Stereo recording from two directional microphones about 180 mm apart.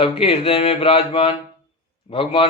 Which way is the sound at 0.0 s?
30° left (ahead or behind).